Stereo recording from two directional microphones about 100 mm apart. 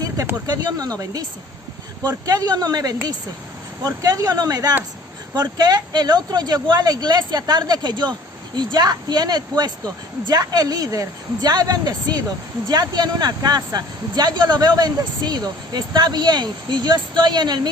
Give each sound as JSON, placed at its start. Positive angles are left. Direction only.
{"t": 0.4, "sound": "speech", "side_deg": -40}
{"t": 2.2, "sound": "speech", "side_deg": -40}